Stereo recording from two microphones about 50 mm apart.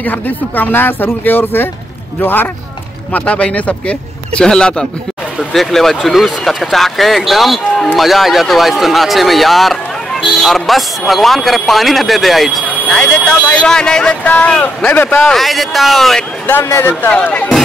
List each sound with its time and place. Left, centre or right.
0.0 s speech: left
3.1 s a man's voice: left; by 4.8 s centre
5.5 s speech: centre
13.0 s speech: left
13.7 s a man's voice: centre
14.2 s speech: left
14.9 s speech: left
15.3 s speech: centre
16.4 s speech: left
17.2 s speech: left